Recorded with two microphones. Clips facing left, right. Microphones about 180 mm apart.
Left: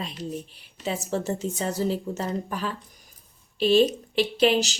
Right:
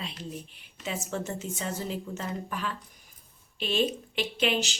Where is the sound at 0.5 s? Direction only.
35° left (ahead or behind).